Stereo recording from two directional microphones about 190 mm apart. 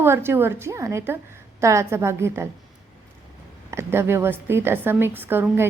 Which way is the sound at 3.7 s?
15° right (ahead or behind).